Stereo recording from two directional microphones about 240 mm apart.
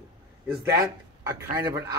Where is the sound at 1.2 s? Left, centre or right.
Centre.